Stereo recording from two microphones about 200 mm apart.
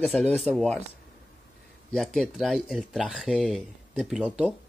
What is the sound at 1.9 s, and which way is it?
Speech, centre (ahead or behind).